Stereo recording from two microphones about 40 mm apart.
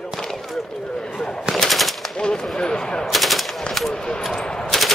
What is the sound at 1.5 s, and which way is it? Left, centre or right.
Machine gun, centre.